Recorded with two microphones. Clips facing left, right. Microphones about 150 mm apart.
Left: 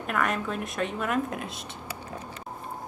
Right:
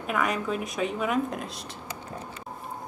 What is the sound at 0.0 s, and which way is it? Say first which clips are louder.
A woman's voice: right 1 dB; centre (ahead or behind).